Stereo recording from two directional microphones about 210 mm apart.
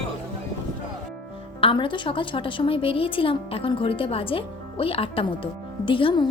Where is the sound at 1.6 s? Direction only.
25° left (ahead or behind).